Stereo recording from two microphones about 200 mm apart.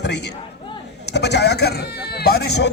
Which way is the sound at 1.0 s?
55° left (ahead or behind).